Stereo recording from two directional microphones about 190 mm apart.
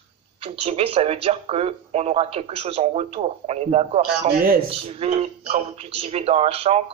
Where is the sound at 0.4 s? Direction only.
30° right (ahead or behind).